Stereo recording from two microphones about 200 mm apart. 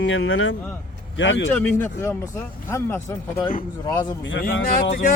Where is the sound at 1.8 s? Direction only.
15° left (ahead or behind).